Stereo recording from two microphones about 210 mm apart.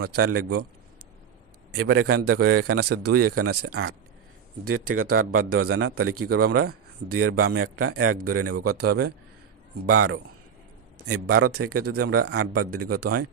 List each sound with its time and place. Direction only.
0.2 s speech: 90° right
1.7 s speech: 80° right